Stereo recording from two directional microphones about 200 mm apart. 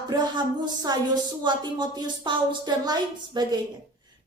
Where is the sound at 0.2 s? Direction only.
20° right (ahead or behind).